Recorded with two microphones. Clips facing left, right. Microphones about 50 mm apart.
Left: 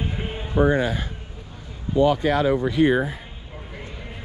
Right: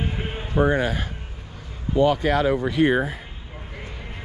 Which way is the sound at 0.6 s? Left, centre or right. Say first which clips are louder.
Left 1 dB; right.